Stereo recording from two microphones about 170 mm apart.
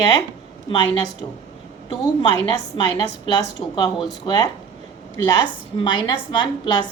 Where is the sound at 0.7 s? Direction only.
30° left (ahead or behind).